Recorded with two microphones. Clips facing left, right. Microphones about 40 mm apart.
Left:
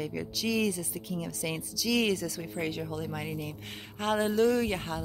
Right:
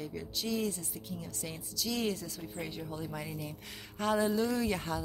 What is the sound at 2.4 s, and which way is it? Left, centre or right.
Speech, left.